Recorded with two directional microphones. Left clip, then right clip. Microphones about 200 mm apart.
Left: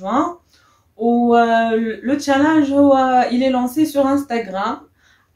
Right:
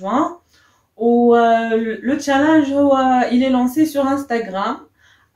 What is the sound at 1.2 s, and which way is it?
Speech, 20° left (ahead or behind).